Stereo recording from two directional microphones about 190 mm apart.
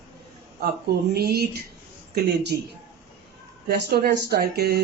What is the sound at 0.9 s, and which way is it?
Speech, 55° right (ahead or behind).